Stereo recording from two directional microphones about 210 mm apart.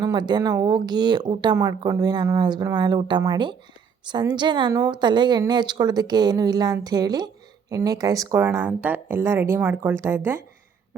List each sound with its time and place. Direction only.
0.0 s speech: 20° right (ahead or behind)